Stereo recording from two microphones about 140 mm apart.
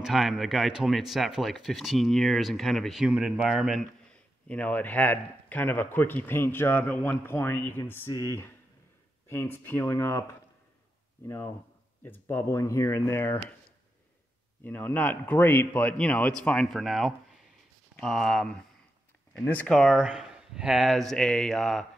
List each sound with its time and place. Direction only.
0.0 s speech: centre (ahead or behind)
4.1 s speech: 10° left (ahead or behind)
11.2 s speech: 15° left (ahead or behind)
14.6 s speech: 15° left (ahead or behind)